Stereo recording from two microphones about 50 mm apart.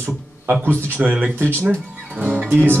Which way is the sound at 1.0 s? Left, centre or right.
Right.